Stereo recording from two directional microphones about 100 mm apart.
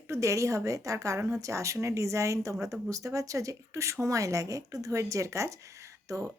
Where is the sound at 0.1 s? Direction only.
30° right (ahead or behind).